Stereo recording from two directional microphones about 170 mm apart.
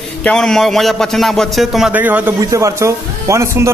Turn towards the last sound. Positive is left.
turn(degrees=-15)  # may be behind; listen again after turning